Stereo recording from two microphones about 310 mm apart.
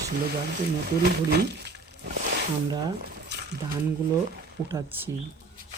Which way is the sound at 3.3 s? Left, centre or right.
Right.